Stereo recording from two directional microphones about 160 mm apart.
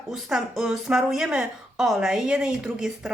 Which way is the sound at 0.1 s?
5° right (ahead or behind).